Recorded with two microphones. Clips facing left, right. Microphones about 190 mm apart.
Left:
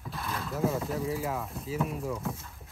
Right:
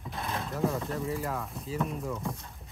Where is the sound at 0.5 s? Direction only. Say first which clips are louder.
Left 2 dB; 5° left (ahead or behind).